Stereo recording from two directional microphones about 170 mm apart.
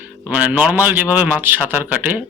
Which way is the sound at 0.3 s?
10° right (ahead or behind).